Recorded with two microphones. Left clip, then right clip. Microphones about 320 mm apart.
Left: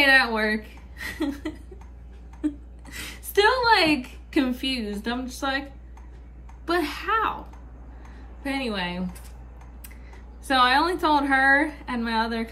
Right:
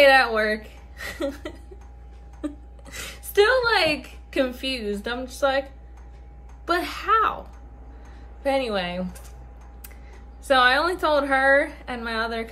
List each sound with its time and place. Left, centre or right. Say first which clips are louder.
0.0 s a woman's voice: right 3 dB; centre
8.4 s a woman's voice: right 5 dB; centre
10.4 s a woman's voice: right 1 dB; centre